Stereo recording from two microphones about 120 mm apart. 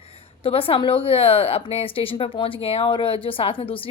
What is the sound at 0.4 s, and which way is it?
A woman's voice, 50° left (ahead or behind).